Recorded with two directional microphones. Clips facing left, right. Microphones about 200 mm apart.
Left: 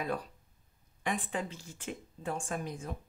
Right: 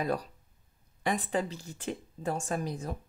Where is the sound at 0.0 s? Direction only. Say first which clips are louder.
Right 4 dB; 40° right (ahead or behind).